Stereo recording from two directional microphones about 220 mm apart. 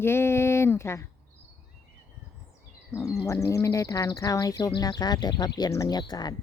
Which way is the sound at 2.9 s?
15° left (ahead or behind).